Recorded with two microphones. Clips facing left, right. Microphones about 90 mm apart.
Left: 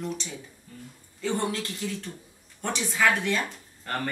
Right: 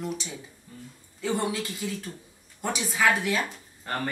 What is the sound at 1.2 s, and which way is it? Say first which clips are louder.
A woman's voice: even; 5° right (ahead or behind).